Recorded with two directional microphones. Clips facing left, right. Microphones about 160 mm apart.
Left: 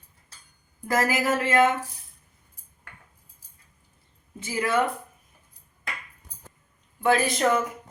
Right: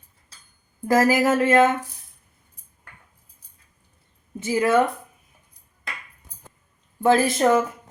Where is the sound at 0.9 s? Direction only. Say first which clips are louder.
Right 6 dB; 30° right (ahead or behind).